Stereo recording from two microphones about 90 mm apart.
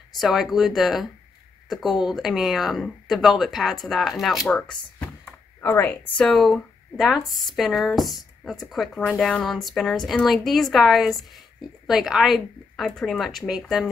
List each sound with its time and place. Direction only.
0.2 s speech: centre (ahead or behind)
5.6 s a woman's voice: 20° left (ahead or behind)
6.2 s speech: 5° left (ahead or behind)
8.9 s speech: 10° left (ahead or behind)